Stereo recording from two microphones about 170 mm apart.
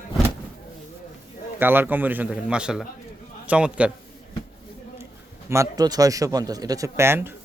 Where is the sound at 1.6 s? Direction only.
10° right (ahead or behind).